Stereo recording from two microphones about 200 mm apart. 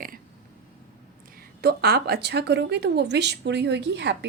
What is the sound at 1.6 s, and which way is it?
A woman's voice, 50° right (ahead or behind).